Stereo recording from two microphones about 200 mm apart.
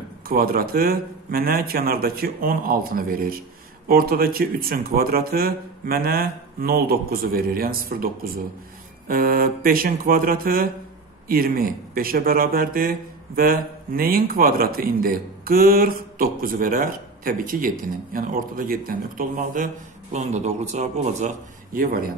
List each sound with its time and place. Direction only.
0.3 s a man's voice: 50° right (ahead or behind)
21.7 s a man's voice: 45° right (ahead or behind)